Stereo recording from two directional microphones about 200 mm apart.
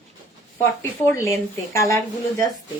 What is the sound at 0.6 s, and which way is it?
Speech, 15° left (ahead or behind).